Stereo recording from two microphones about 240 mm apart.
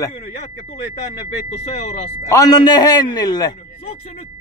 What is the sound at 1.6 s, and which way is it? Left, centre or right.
Speech, left.